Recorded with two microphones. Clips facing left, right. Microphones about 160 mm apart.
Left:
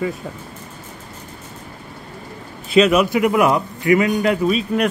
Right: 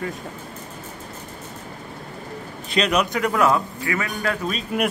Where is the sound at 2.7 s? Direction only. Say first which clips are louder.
Left 7 dB; 5° left (ahead or behind).